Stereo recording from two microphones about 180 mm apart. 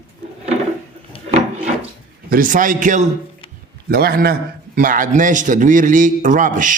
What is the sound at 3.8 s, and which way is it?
A man's voice, 55° right (ahead or behind).